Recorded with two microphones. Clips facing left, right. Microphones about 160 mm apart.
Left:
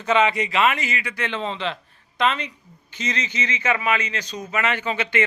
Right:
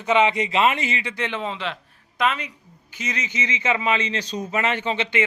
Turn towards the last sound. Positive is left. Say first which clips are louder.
# even
turn(degrees=-20)  # may be behind; listen again after turning